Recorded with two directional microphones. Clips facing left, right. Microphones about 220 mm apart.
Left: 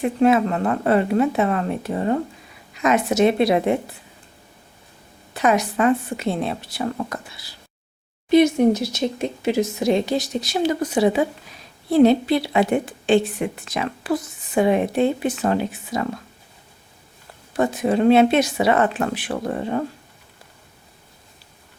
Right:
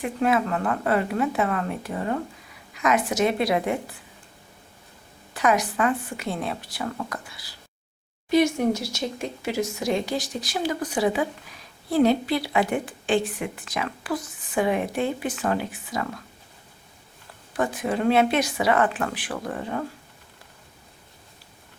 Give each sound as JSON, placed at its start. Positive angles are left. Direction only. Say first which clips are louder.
{"t": 0.0, "sound": "a woman's voice", "louder": "left 6 dB", "side_deg": 25}
{"t": 5.3, "sound": "a woman's voice", "louder": "left 3 dB", "side_deg": 25}
{"t": 17.6, "sound": "a woman's voice", "louder": "left 6 dB", "side_deg": 25}